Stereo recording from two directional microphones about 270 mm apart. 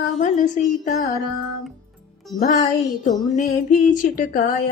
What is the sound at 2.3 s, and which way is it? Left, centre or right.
A woman's voice, left.